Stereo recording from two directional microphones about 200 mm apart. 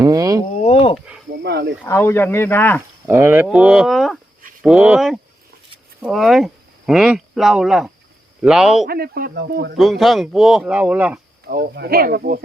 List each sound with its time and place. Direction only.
0.0 s speech: 20° right (ahead or behind)
0.5 s a sound: 35° left (ahead or behind)
0.9 s snake: 5° right (ahead or behind)
1.4 s speech: 60° right (ahead or behind)
1.8 s speech: 10° left (ahead or behind)
3.1 s speech: 10° right (ahead or behind)
8.9 s speech: 50° right (ahead or behind)
9.7 s speech: centre (ahead or behind)
11.4 s speech: 50° right (ahead or behind)